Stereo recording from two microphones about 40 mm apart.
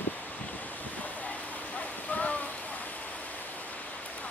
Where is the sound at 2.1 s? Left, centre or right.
Left.